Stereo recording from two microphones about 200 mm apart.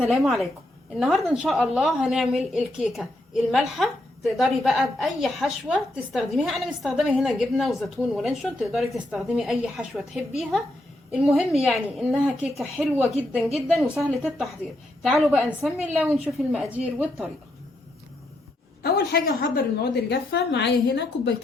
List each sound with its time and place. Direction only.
0.0 s a woman's voice: centre (ahead or behind)
11.1 s a woman's voice: centre (ahead or behind)
18.8 s a woman's voice: 50° left (ahead or behind)